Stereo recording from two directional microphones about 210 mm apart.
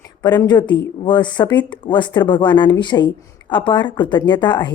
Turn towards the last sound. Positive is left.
turn(degrees=20)  # may be behind; listen again after turning